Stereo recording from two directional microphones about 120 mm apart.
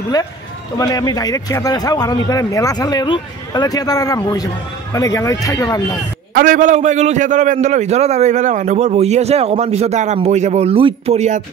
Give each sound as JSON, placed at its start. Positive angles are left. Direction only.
{"t": 0.7, "sound": "speech", "side_deg": 30}
{"t": 6.6, "sound": "a man's voice", "side_deg": -85}
{"t": 11.1, "sound": "speech", "side_deg": -80}